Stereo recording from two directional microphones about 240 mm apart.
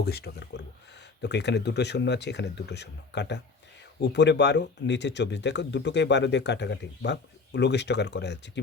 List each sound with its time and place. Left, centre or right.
0.0 s speech: left